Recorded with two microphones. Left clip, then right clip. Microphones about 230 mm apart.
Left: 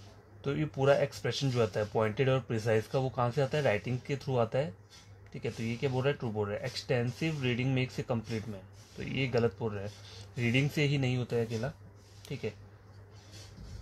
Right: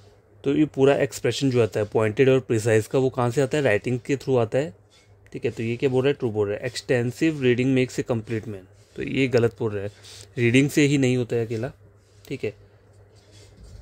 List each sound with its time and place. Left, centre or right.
0.4 s speech: right